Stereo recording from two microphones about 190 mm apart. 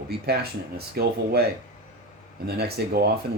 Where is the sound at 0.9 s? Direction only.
55° right (ahead or behind).